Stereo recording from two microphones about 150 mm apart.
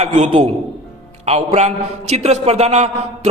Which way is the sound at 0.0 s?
50° right (ahead or behind).